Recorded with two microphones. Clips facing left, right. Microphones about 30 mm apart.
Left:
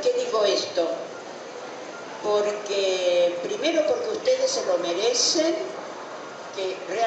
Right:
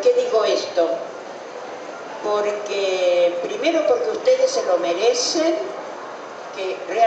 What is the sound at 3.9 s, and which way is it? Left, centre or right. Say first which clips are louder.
Speech: right 6 dB; centre.